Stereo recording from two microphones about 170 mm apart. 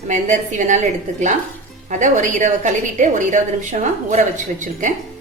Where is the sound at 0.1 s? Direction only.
45° right (ahead or behind).